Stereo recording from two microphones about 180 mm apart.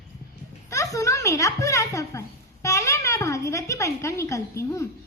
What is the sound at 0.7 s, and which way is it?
A child's voice, 15° left (ahead or behind).